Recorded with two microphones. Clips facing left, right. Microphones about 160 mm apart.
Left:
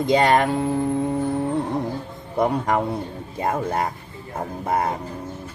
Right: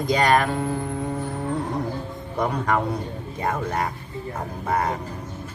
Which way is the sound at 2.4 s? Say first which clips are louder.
Left 3 dB; 25° left (ahead or behind).